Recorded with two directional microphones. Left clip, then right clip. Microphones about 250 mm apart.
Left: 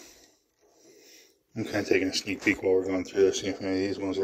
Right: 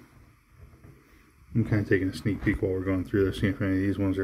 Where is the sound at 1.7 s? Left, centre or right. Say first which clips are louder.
Left 2 dB; centre.